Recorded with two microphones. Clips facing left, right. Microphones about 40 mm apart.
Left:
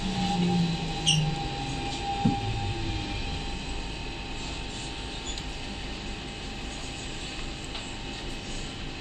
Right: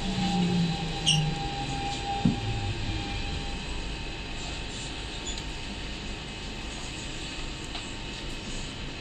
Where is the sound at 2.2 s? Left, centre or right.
Right.